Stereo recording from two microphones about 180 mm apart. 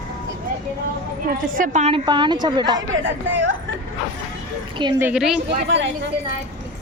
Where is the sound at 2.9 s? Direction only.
90° right.